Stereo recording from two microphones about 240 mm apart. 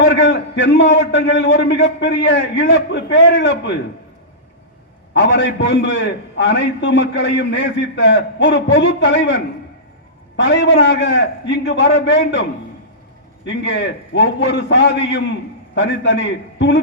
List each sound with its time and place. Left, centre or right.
0.0 s a man's voice: left
5.1 s a man's voice: left